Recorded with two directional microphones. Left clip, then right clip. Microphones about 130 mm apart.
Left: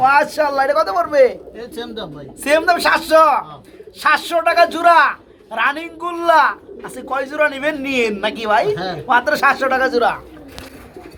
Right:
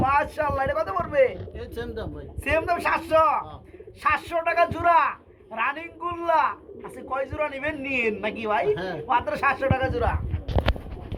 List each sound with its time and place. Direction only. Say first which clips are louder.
0.0 s speech: left 9 dB; 25° left (ahead or behind)
2.4 s a man's voice: left 10 dB; 35° left (ahead or behind)